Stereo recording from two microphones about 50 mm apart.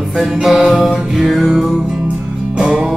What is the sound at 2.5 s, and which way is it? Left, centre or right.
Music, centre.